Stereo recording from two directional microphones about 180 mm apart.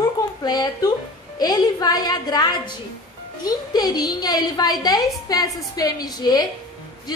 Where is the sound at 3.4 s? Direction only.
20° left (ahead or behind).